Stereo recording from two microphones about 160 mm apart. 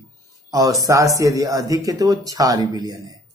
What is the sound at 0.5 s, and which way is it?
Speech, 20° right (ahead or behind).